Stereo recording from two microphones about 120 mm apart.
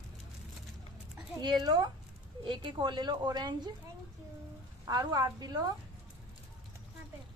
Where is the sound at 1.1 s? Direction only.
35° right (ahead or behind).